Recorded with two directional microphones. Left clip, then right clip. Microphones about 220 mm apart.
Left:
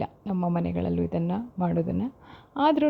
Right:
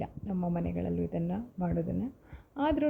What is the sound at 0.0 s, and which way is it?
A woman's voice, 45° left (ahead or behind).